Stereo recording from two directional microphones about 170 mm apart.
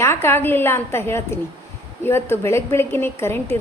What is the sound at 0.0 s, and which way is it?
A woman's voice, 15° left (ahead or behind).